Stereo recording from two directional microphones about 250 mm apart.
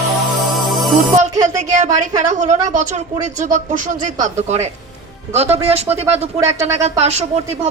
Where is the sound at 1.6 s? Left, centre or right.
Right.